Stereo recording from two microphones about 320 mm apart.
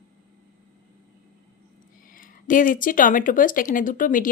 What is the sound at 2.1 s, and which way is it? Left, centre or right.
Speech, left.